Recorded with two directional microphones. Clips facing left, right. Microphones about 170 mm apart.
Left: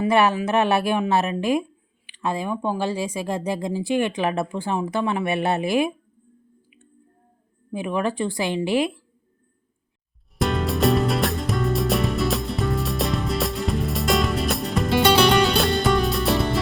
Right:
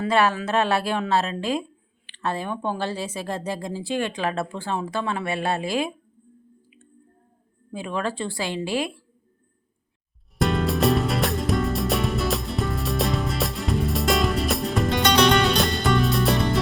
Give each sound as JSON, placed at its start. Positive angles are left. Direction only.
{"t": 0.0, "sound": "speech", "side_deg": 20}
{"t": 7.7, "sound": "speech", "side_deg": 15}
{"t": 10.3, "sound": "music", "side_deg": 0}